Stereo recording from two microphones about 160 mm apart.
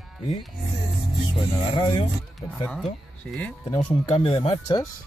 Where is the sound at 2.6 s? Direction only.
5° left (ahead or behind).